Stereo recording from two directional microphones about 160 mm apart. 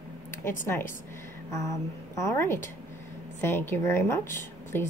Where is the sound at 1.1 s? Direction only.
20° left (ahead or behind).